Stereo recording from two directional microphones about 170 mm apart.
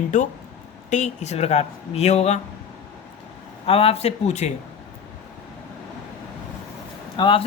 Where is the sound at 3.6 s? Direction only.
35° left (ahead or behind).